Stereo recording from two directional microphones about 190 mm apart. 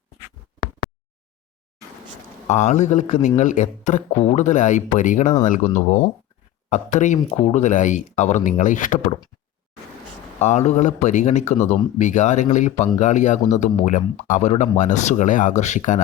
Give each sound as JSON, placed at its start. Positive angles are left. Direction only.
{"t": 2.5, "sound": "a man's voice", "side_deg": 40}
{"t": 10.4, "sound": "a man's voice", "side_deg": 35}